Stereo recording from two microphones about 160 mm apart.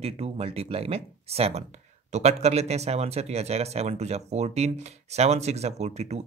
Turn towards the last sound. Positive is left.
turn(degrees=-45)  # may be behind; listen again after turning